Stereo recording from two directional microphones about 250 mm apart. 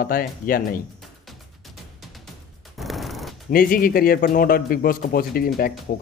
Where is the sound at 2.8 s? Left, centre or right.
Centre.